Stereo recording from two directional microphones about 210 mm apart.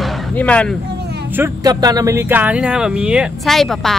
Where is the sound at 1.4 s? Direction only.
20° right (ahead or behind).